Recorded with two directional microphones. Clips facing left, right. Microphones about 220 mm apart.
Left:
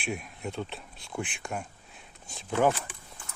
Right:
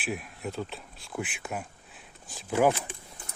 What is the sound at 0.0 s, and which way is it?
Speech, centre (ahead or behind).